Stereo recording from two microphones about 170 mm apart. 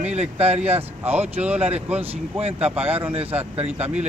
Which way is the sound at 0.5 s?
10° right (ahead or behind).